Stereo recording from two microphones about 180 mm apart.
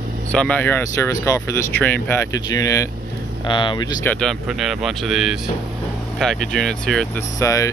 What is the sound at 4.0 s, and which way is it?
Speech, 5° left (ahead or behind).